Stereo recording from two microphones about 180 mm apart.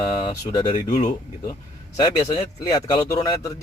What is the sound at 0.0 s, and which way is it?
A man's voice, 30° left (ahead or behind).